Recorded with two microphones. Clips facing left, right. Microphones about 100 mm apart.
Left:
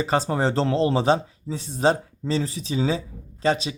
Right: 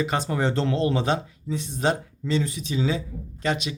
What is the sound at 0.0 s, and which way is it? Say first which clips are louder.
Speech: left 2 dB; 35° left (ahead or behind).